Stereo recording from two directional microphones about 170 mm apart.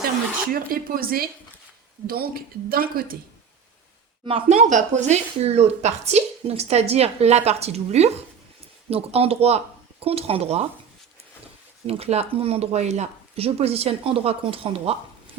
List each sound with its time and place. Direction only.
0.5 s a woman's voice: 60° right (ahead or behind)
4.3 s speech: 35° right (ahead or behind)
11.9 s speech: 35° right (ahead or behind)